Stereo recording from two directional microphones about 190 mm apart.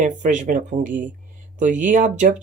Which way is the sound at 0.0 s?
40° right (ahead or behind).